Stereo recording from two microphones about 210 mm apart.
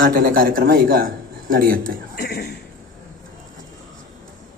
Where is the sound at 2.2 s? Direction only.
50° left (ahead or behind).